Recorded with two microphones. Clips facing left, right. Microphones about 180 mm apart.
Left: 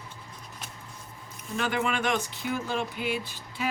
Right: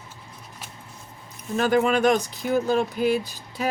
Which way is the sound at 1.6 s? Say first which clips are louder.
Right 9 dB; 40° right (ahead or behind).